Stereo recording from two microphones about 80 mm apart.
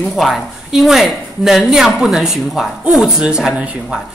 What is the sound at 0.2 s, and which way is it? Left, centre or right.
A man's voice, centre.